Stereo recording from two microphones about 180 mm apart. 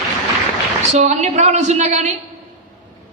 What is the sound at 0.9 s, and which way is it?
A woman's voice, 35° right (ahead or behind).